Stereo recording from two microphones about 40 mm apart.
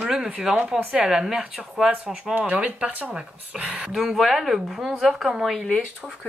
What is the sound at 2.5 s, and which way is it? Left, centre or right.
Speech, right.